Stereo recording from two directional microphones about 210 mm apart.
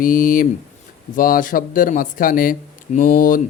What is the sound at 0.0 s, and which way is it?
Speech, 40° left (ahead or behind).